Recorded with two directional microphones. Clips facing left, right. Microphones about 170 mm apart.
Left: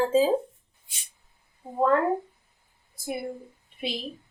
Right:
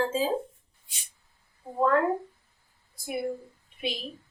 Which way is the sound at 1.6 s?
20° left (ahead or behind).